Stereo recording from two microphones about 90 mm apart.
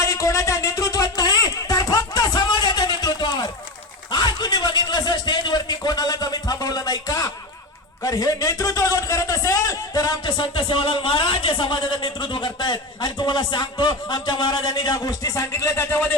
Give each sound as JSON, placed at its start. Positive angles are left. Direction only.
{"t": 0.0, "sound": "a sound", "side_deg": 35}
{"t": 8.0, "sound": "a man's voice", "side_deg": 40}
{"t": 10.2, "sound": "speech", "side_deg": 65}
{"t": 14.9, "sound": "a man's voice", "side_deg": 45}